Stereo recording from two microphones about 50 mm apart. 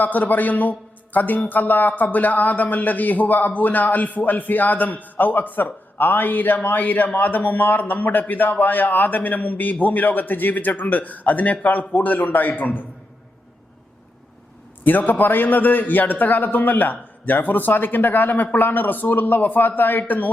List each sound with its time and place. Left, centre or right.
0.0 s a man's voice: left
14.8 s speech: left